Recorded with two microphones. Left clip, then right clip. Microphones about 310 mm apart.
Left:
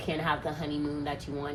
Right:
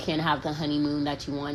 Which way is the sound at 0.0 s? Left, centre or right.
Right.